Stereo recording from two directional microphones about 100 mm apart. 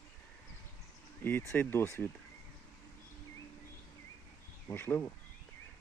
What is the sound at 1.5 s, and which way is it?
Speech, 20° left (ahead or behind).